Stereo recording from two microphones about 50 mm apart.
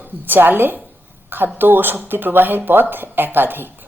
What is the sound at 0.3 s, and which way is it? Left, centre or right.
A woman's voice, right.